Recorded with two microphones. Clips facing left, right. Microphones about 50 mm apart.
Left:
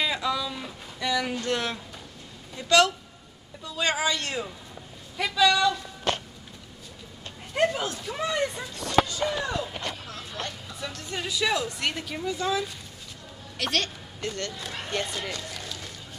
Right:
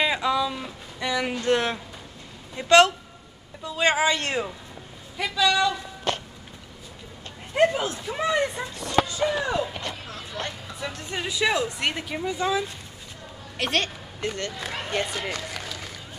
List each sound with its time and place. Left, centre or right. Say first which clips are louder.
0.0 s a sound: right 4 dB; right
1.4 s a man's voice: right 5 dB; right
5.1 s a man's voice: even; centre
7.5 s a woman's voice: right 4 dB; centre
15.2 s run: right 3 dB; centre